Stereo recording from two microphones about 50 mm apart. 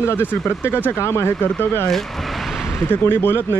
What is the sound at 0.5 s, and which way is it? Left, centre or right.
Speech, left.